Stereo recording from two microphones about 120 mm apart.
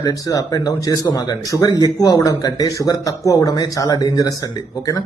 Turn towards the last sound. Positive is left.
turn(degrees=35)  # may be behind; listen again after turning